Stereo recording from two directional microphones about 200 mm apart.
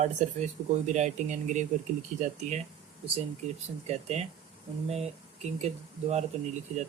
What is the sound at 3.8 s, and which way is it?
Speech, 35° right (ahead or behind).